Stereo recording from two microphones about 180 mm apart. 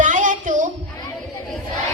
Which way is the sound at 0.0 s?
45° right (ahead or behind).